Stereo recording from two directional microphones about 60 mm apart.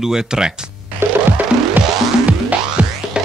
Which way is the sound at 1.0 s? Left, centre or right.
Right.